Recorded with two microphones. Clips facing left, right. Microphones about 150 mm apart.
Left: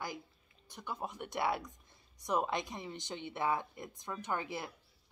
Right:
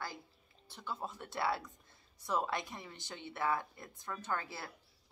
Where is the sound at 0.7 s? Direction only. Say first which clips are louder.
Left 1 dB; 15° left (ahead or behind).